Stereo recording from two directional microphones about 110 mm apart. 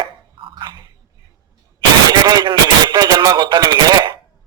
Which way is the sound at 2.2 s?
40° right (ahead or behind).